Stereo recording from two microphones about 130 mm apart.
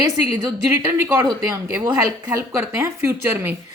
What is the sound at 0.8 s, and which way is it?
Speech, 20° right (ahead or behind).